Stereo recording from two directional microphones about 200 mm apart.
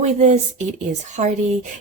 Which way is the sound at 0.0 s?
35° right (ahead or behind).